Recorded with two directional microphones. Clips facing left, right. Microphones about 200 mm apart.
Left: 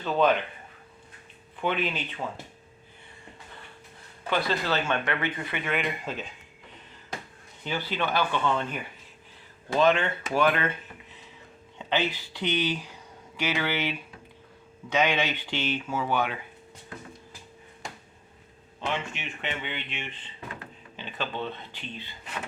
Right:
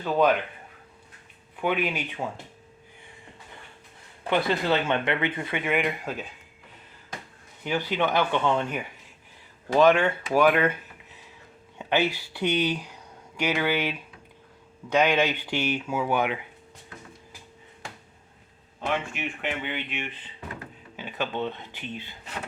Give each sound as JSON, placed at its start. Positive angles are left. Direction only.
{"t": 0.0, "sound": "speech", "side_deg": -10}
{"t": 1.6, "sound": "speech", "side_deg": -15}
{"t": 4.3, "sound": "speech", "side_deg": -20}
{"t": 7.6, "sound": "speech", "side_deg": -15}
{"t": 11.8, "sound": "speech", "side_deg": -10}
{"t": 19.1, "sound": "speech", "side_deg": -5}
{"t": 20.9, "sound": "a sound", "side_deg": -10}
{"t": 21.3, "sound": "speech", "side_deg": -15}